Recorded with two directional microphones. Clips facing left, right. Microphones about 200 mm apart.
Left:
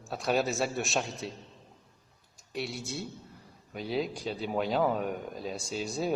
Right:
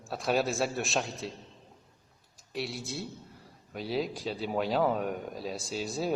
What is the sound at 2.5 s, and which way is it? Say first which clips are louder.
Speech: even; centre (ahead or behind).